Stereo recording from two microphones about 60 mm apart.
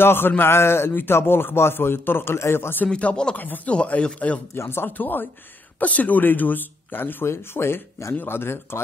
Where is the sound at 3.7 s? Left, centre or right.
Centre.